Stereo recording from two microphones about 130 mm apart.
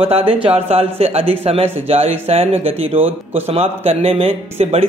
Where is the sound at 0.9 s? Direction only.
50° right (ahead or behind).